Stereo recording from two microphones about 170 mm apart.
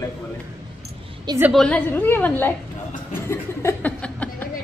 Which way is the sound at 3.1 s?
15° left (ahead or behind).